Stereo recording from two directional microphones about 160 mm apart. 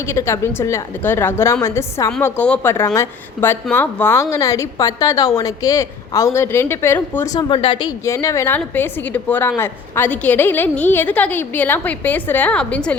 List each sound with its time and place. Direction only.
0.1 s a woman's voice: 15° left (ahead or behind)
7.3 s a woman's voice: 30° left (ahead or behind); by 13.0 s 5° left (ahead or behind)